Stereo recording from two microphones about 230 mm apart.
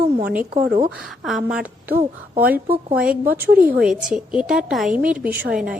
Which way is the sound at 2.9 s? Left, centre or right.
Centre.